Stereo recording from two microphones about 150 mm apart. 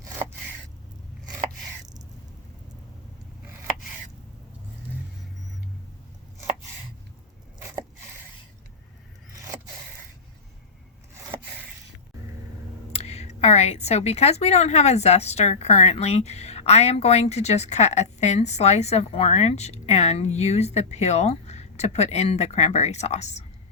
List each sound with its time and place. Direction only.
12.9 s a woman's voice: 45° left (ahead or behind)